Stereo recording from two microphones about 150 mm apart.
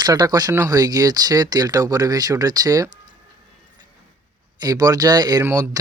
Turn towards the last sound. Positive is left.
turn(degrees=-20)  # may be behind; listen again after turning